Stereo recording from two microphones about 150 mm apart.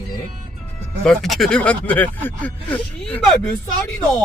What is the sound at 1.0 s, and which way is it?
Speech, 5° left (ahead or behind).